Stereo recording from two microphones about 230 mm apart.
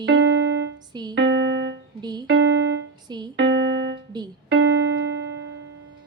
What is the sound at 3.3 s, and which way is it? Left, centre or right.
Piano, right.